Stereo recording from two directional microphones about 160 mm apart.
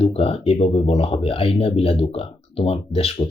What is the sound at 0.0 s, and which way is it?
Speech, 35° left (ahead or behind).